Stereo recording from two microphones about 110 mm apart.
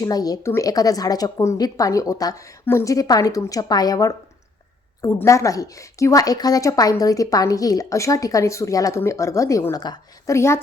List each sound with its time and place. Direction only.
0.0 s a woman's voice: 35° left (ahead or behind)
10.3 s speech: 25° left (ahead or behind)